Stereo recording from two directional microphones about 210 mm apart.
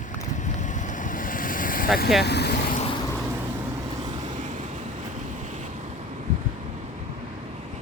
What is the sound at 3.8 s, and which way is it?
Vehicle, 20° right (ahead or behind).